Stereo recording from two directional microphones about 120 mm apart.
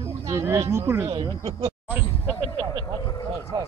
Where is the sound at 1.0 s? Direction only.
45° right (ahead or behind).